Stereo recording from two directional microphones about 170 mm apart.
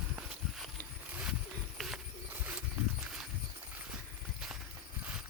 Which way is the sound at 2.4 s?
5° right (ahead or behind).